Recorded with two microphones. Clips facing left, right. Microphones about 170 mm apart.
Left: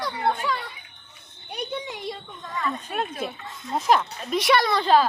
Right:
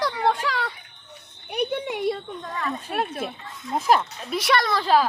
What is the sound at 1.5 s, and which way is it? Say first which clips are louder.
Music: right 6 dB; 65° right (ahead or behind).